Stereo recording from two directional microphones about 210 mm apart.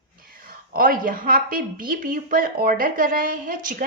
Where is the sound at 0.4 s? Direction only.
45° right (ahead or behind).